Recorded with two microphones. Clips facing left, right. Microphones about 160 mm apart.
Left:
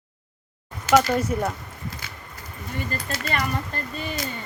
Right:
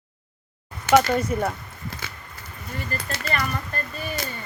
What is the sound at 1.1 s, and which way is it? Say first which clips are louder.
Speech: even; 5° left (ahead or behind).